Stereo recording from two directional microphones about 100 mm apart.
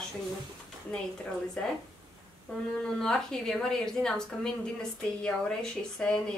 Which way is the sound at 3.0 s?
5° left (ahead or behind).